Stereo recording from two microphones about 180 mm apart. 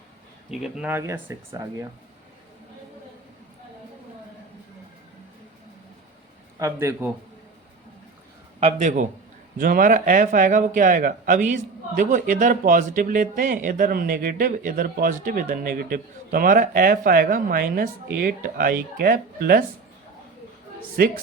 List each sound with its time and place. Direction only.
0.5 s speech: 5° right (ahead or behind)
6.6 s speech: 15° right (ahead or behind)
8.6 s a man's voice: 40° right (ahead or behind)
9.6 s a man's voice: 50° right (ahead or behind)
21.0 s speech: 60° right (ahead or behind)